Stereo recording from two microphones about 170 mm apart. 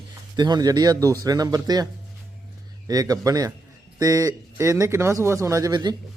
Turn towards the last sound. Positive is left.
turn(degrees=-25)  # may be behind; listen again after turning